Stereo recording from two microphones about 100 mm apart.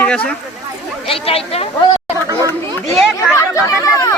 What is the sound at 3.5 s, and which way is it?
Chatter, 30° left (ahead or behind).